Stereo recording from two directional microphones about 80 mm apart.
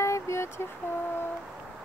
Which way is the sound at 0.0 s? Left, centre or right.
Left.